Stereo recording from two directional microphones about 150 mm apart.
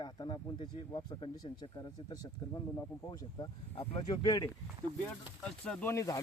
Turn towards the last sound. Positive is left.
turn(degrees=20)  # may be behind; listen again after turning